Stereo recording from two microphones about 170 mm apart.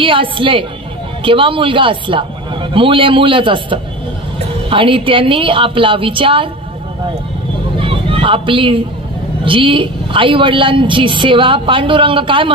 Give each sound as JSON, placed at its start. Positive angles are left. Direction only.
{"t": 0.0, "sound": "a man's voice", "side_deg": -30}
{"t": 7.8, "sound": "a sound", "side_deg": -30}
{"t": 9.4, "sound": "a woman's voice", "side_deg": -30}